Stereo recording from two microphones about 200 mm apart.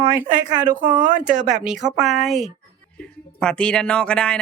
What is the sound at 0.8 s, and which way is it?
Speech, 25° right (ahead or behind).